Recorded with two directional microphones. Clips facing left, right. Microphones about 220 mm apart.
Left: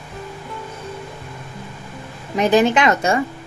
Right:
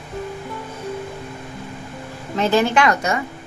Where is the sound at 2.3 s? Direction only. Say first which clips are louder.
Left 2 dB; 15° left (ahead or behind).